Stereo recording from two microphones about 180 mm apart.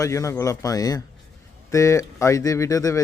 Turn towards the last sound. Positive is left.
turn(degrees=20)  # may be behind; listen again after turning